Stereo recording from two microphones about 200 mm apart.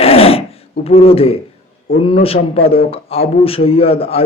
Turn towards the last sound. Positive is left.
turn(degrees=30)  # may be behind; listen again after turning